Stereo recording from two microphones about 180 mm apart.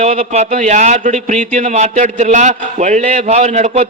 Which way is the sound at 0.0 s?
40° right (ahead or behind).